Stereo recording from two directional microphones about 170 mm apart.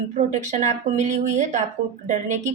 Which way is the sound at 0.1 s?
45° right (ahead or behind).